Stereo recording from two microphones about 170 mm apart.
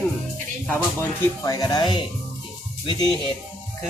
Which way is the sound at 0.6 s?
20° left (ahead or behind).